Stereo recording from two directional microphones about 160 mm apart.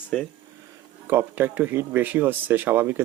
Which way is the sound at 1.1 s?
15° right (ahead or behind).